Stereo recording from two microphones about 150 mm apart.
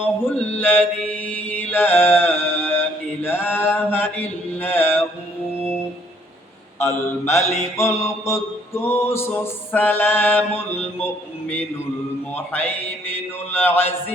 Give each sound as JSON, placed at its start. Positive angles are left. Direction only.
{"t": 0.3, "sound": "mantra", "side_deg": 15}
{"t": 6.7, "sound": "mantra", "side_deg": 15}